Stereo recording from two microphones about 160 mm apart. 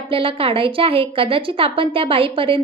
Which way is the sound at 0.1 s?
35° right (ahead or behind).